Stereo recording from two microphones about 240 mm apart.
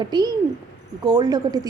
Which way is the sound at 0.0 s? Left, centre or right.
Centre.